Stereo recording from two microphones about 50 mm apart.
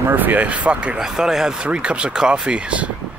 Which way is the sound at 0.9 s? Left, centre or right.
Centre.